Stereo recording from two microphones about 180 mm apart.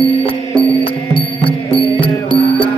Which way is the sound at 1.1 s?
30° left (ahead or behind).